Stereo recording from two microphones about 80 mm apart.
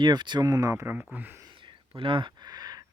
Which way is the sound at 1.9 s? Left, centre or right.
Right.